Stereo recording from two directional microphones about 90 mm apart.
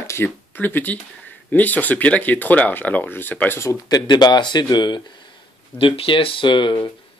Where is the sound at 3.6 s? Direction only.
40° left (ahead or behind).